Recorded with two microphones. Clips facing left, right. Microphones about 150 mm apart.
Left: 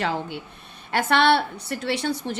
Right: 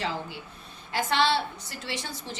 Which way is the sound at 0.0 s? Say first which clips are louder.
Left 6 dB; 65° left (ahead or behind).